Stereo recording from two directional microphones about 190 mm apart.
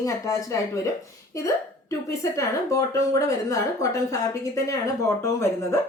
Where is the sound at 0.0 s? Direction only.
15° left (ahead or behind).